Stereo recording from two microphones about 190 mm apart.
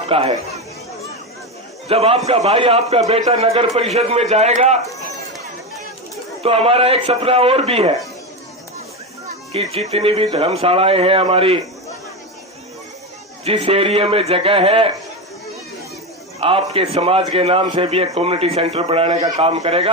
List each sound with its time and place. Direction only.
0.1 s a man's voice: 35° right (ahead or behind)
1.9 s a man's voice: 30° right (ahead or behind)
6.4 s a man's voice: 30° right (ahead or behind)
9.5 s a man's voice: 35° right (ahead or behind)
13.4 s a man's voice: 30° right (ahead or behind)
16.4 s a man's voice: 30° right (ahead or behind)